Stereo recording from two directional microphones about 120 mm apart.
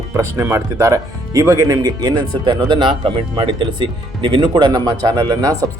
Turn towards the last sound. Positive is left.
turn(degrees=-35)  # may be behind; listen again after turning